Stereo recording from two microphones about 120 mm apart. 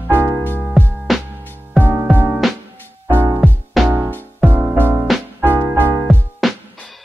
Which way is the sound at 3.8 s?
Centre (ahead or behind).